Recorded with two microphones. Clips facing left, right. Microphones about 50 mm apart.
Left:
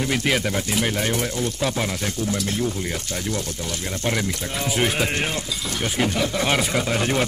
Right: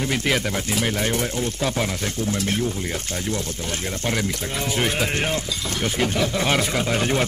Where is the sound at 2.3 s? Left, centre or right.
Right.